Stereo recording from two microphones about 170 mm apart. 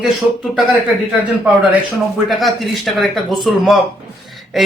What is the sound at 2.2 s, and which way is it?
Speech, centre (ahead or behind).